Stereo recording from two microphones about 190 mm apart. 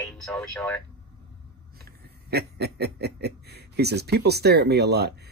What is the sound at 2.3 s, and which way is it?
Speech, 60° right (ahead or behind).